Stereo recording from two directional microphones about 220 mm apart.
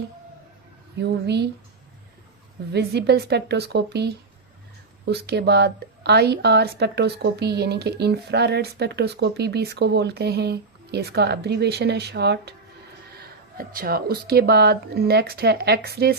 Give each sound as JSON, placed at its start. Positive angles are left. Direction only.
{"t": 0.9, "sound": "a woman's voice", "side_deg": -50}
{"t": 2.7, "sound": "a woman's voice", "side_deg": -50}